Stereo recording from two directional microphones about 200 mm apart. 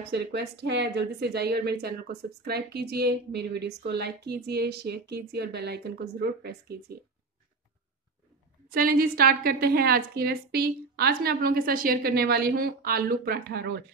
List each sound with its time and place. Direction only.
0.1 s speech: 60° right (ahead or behind)
8.7 s a woman's voice: 45° right (ahead or behind)